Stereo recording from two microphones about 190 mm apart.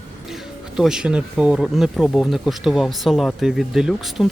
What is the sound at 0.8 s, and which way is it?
Speech, 5° right (ahead or behind).